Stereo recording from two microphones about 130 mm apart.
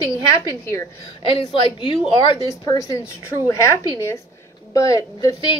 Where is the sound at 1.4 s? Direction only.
35° left (ahead or behind).